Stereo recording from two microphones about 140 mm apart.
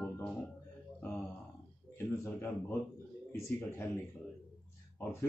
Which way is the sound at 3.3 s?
15° left (ahead or behind).